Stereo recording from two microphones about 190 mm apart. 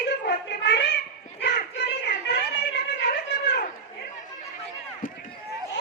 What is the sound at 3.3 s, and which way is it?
Chatter, 65° left (ahead or behind).